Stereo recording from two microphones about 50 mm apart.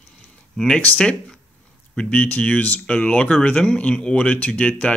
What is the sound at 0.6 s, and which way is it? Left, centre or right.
Speech, centre.